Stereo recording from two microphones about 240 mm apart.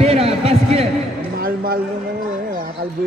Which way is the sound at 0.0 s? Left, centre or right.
Right.